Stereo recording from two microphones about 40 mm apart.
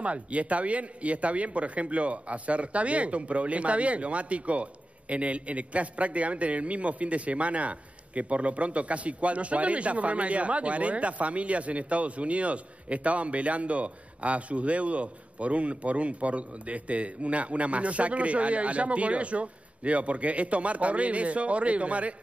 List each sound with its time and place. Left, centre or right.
0.0 s a man's voice: right